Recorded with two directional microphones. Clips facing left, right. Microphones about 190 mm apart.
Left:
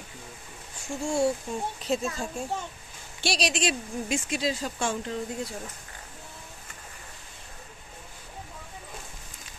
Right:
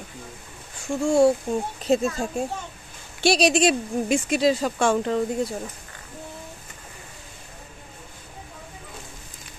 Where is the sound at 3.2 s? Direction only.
55° right (ahead or behind); by 5.2 s 70° right (ahead or behind).